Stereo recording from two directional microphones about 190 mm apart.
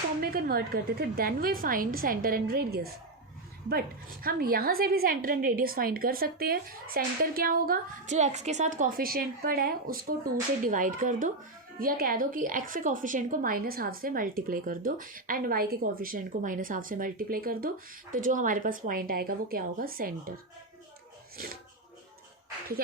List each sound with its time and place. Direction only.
0.2 s a woman's voice: 50° right (ahead or behind)